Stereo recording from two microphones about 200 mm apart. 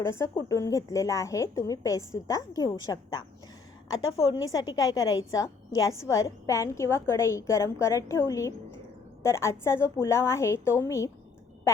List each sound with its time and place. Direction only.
0.0 s a woman's voice: 15° left (ahead or behind)
3.9 s a woman's voice: 80° left
4.2 s a woman's voice: 20° left (ahead or behind)